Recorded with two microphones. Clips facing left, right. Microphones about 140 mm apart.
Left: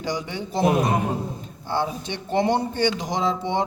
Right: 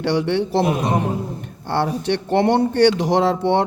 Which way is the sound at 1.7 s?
65° right (ahead or behind).